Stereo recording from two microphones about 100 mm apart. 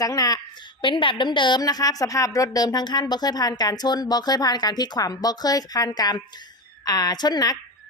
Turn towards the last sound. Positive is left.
turn(degrees=40)  # may be behind; listen again after turning